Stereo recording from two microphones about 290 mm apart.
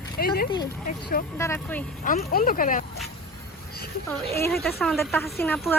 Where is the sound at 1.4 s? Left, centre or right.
Centre.